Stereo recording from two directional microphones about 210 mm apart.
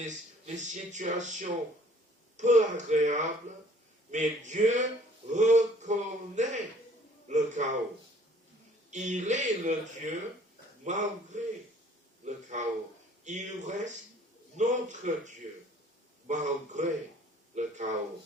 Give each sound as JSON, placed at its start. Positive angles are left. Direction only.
{"t": 0.0, "sound": "speech", "side_deg": -35}
{"t": 8.9, "sound": "a man's voice", "side_deg": -35}